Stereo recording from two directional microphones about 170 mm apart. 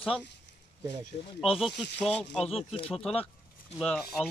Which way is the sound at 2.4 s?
35° left (ahead or behind).